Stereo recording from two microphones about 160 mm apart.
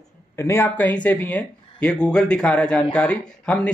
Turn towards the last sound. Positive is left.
turn(degrees=5)  # may be behind; listen again after turning